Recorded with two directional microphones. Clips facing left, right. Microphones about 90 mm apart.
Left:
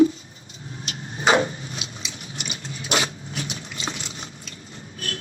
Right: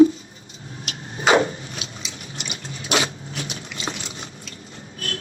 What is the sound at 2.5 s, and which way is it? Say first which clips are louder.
Dog: right 2 dB; 35° right (ahead or behind).